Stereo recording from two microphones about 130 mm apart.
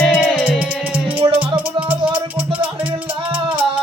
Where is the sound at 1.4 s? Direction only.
10° right (ahead or behind).